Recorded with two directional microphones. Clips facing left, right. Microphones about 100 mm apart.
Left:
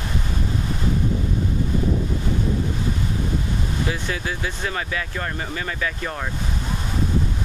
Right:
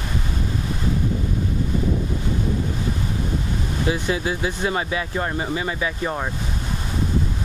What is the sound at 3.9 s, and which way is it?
Speech, 20° right (ahead or behind).